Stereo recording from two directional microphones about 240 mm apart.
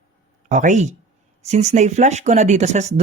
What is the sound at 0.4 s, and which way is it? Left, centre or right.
Speech, right.